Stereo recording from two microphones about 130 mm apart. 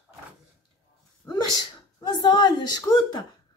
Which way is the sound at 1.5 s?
30° left (ahead or behind).